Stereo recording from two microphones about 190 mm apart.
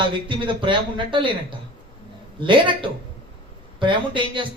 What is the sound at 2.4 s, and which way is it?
A man's voice, 25° right (ahead or behind).